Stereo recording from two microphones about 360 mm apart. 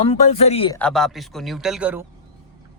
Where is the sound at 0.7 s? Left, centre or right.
Centre.